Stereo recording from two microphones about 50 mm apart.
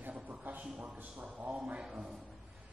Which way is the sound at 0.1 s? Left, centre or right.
Right.